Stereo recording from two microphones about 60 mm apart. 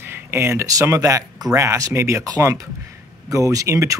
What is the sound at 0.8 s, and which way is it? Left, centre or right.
Speech, right.